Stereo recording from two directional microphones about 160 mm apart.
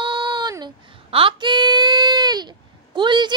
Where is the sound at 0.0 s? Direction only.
30° right (ahead or behind).